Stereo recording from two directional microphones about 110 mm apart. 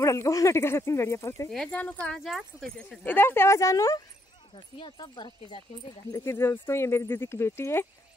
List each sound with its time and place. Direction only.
0.0 s speech: 30° left (ahead or behind)
1.7 s speech: 15° left (ahead or behind)
2.1 s speech: centre (ahead or behind); by 4.0 s 30° left (ahead or behind)
4.6 s speech: 50° left (ahead or behind)
6.1 s speech: 25° left (ahead or behind)